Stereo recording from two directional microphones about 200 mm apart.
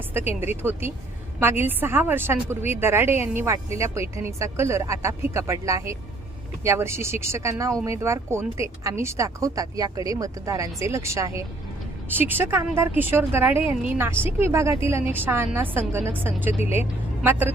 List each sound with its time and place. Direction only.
0.1 s a woman's voice: 10° right (ahead or behind)